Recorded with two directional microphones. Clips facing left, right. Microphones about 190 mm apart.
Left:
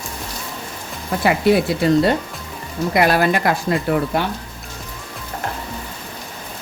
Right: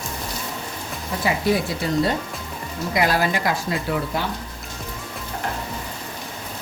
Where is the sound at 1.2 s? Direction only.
65° left (ahead or behind).